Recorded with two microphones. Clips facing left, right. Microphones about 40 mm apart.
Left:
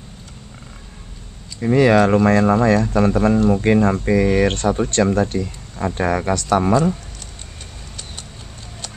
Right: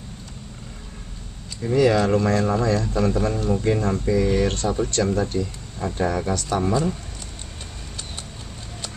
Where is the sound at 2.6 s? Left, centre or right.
Left.